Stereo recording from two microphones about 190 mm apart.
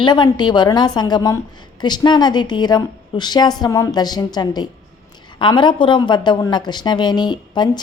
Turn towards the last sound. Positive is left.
turn(degrees=20)  # may be behind; listen again after turning